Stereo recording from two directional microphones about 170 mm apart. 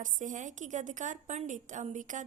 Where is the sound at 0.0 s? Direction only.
50° right (ahead or behind).